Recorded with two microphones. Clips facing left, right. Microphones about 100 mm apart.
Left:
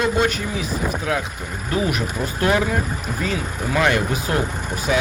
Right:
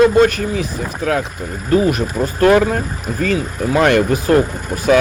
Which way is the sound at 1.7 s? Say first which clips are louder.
Right 8 dB; 40° right (ahead or behind).